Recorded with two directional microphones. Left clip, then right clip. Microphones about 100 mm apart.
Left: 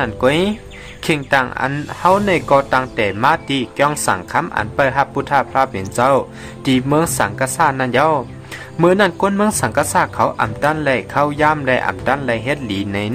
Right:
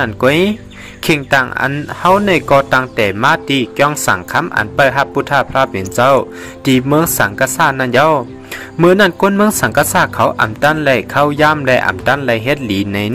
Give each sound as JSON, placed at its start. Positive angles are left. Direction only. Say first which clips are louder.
{"t": 0.0, "sound": "speech", "louder": "right 3 dB", "side_deg": -35}